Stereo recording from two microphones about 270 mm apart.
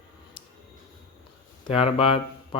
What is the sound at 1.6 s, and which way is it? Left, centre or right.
Speech, left.